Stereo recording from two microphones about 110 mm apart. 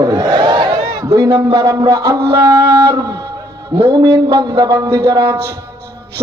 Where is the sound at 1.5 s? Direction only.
30° right (ahead or behind).